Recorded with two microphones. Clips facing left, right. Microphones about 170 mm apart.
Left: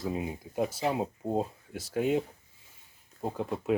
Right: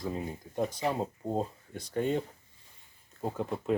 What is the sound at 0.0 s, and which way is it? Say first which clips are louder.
Speech: left 2 dB; 10° left (ahead or behind).